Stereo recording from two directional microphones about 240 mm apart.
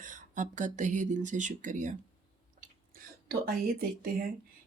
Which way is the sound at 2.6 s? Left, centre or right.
Right.